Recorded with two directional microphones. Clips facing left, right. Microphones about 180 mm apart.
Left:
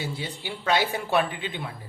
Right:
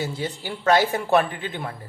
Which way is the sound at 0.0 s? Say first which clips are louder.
Right 5 dB; 45° right (ahead or behind).